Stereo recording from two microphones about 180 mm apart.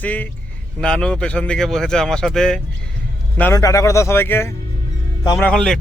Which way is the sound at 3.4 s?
15° left (ahead or behind).